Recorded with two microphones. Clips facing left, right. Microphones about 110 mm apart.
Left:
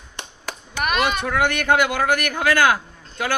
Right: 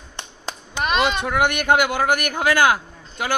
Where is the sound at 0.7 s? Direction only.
25° right (ahead or behind).